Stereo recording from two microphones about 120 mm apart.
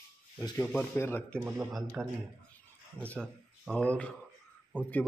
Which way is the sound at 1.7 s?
Centre (ahead or behind).